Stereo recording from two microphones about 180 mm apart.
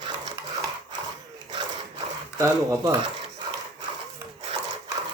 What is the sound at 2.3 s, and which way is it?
Speech, 20° right (ahead or behind).